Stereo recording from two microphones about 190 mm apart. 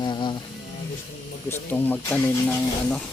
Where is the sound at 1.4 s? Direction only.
10° left (ahead or behind).